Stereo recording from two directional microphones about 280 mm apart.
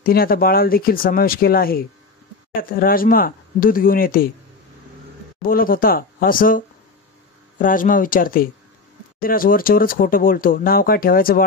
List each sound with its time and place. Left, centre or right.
0.0 s speech: left
5.4 s speech: left